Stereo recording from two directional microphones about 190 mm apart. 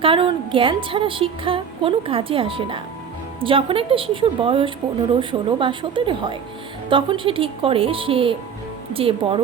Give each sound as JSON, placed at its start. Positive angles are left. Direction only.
{"t": 0.0, "sound": "a woman's voice", "side_deg": -25}